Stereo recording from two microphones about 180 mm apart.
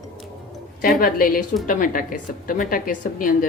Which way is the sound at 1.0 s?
55° left (ahead or behind).